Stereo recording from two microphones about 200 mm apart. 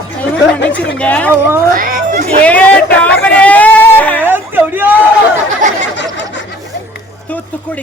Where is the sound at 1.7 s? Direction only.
45° right (ahead or behind).